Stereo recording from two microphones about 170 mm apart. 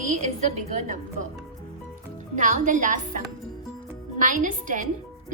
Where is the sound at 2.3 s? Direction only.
45° right (ahead or behind).